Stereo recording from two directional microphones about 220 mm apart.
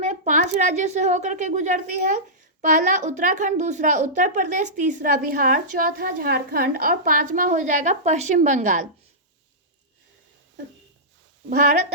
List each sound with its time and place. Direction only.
0.0 s speech: 35° right (ahead or behind)